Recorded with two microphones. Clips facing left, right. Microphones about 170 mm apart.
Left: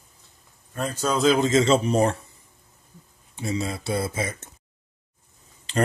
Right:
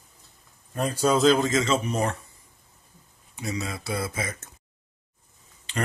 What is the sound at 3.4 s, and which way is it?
Speech, 30° left (ahead or behind).